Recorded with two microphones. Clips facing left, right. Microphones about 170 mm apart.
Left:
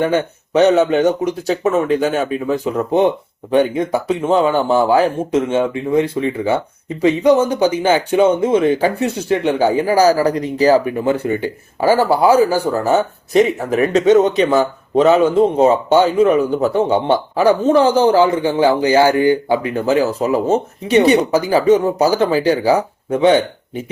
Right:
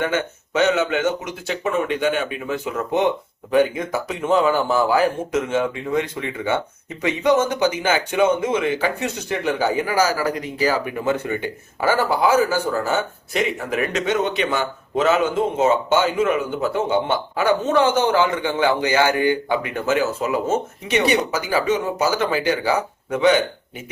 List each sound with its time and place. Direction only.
0.0 s speech: 35° left (ahead or behind)